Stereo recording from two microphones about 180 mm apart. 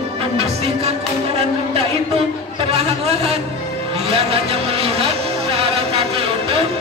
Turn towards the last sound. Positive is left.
turn(degrees=-35)  # may be behind; listen again after turning